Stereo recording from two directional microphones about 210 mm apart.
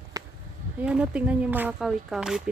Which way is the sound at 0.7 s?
5° right (ahead or behind).